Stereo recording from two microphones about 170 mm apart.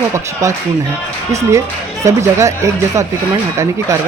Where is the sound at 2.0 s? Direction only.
15° right (ahead or behind).